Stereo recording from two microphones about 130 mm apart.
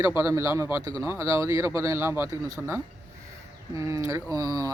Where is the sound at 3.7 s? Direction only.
25° right (ahead or behind).